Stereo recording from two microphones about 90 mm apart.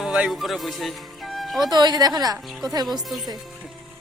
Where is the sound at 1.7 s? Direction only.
50° right (ahead or behind).